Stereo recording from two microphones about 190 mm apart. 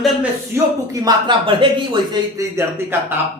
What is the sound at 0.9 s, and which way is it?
Speech, 20° right (ahead or behind).